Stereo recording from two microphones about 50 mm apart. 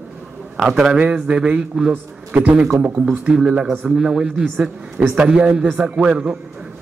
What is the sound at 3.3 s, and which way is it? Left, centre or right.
A man's voice, centre.